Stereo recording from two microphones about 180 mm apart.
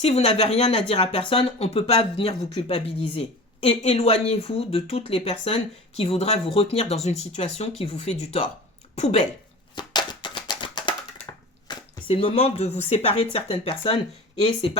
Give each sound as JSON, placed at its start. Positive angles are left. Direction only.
{"t": 0.0, "sound": "speech", "side_deg": 35}
{"t": 9.7, "sound": "a sound", "side_deg": 25}
{"t": 11.7, "sound": "speech", "side_deg": 30}